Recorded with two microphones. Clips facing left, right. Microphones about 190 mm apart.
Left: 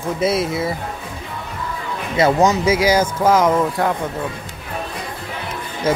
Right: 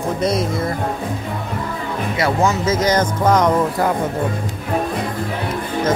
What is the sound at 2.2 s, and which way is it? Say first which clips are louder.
Speech: left 4 dB; 20° left (ahead or behind).